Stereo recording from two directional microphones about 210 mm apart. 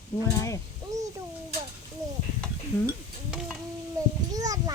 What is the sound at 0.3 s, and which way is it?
Speech, 15° left (ahead or behind).